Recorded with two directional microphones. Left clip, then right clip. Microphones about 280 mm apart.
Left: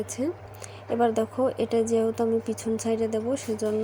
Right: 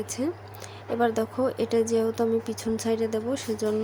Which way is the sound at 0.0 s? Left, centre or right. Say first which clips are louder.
Even; centre.